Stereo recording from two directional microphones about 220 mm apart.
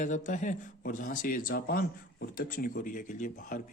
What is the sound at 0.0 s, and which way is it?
Speech, 35° left (ahead or behind).